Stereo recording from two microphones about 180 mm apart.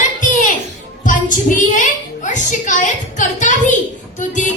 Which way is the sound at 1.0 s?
45° left (ahead or behind).